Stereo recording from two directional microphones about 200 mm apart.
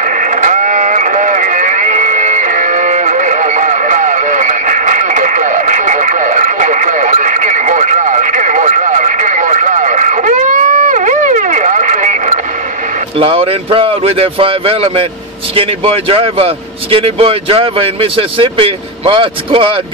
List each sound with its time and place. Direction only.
0.2 s radio: 40° right (ahead or behind)
13.2 s speech: 30° right (ahead or behind)